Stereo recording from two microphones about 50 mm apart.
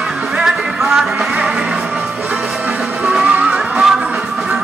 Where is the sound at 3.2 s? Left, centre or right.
Right.